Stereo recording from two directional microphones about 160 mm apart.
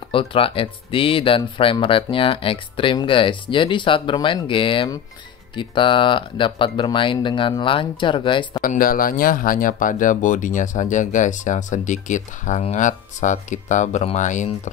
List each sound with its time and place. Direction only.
0.1 s speech: 35° left (ahead or behind)
8.5 s speech: 60° left (ahead or behind)